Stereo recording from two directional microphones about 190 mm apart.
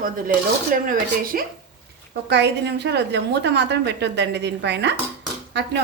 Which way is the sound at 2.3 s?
65° right (ahead or behind).